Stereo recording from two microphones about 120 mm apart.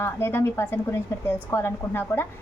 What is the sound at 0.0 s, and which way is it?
A woman's voice, 20° left (ahead or behind).